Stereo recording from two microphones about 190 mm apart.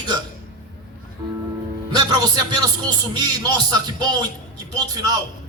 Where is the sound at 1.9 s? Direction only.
20° right (ahead or behind).